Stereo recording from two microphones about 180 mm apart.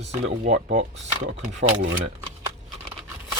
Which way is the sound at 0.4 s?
40° right (ahead or behind).